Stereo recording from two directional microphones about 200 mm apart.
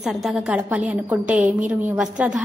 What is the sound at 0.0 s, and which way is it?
A woman's voice, centre (ahead or behind).